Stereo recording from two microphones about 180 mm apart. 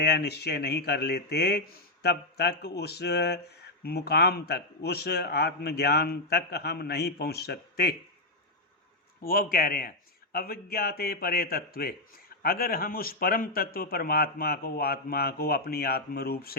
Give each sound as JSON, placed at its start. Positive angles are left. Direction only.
{"t": 0.0, "sound": "speech", "side_deg": 65}
{"t": 9.2, "sound": "speech", "side_deg": 55}